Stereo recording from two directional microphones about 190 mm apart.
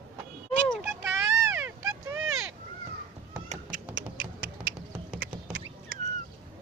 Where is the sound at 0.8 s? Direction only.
15° right (ahead or behind).